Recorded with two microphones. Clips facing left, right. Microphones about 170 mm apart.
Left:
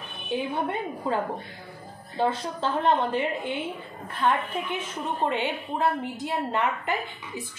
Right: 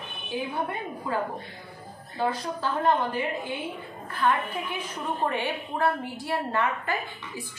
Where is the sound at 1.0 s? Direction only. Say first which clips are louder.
Left 1 dB; 25° left (ahead or behind).